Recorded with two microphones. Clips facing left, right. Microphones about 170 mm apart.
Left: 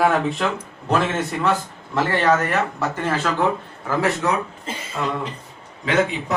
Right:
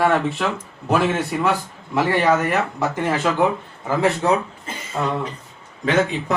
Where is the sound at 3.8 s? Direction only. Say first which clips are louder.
Right 2 dB; 25° right (ahead or behind).